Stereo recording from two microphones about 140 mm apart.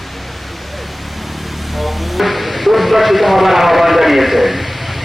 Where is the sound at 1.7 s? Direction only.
Centre (ahead or behind).